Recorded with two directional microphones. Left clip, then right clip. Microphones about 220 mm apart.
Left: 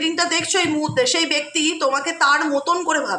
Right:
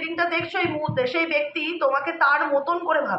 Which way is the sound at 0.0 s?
55° left (ahead or behind).